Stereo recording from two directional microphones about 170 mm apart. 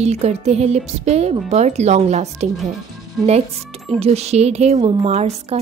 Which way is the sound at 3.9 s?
35° right (ahead or behind).